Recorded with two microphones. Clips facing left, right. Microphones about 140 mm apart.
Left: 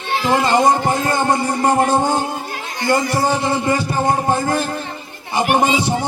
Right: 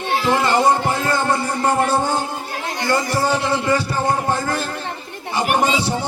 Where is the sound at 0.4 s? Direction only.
15° left (ahead or behind).